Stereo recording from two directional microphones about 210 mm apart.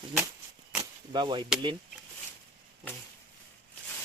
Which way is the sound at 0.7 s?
20° right (ahead or behind).